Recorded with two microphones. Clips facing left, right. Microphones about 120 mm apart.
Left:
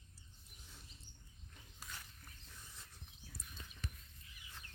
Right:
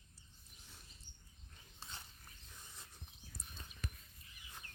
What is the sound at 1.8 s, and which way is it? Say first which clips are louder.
Dog: even; 25° right (ahead or behind).